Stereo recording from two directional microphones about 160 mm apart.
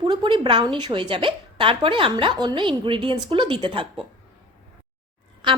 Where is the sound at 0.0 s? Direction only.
30° right (ahead or behind).